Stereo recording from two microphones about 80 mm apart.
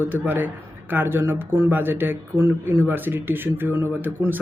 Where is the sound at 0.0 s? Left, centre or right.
Right.